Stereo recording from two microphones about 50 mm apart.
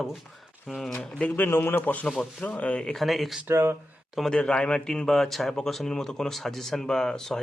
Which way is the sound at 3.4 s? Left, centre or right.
Right.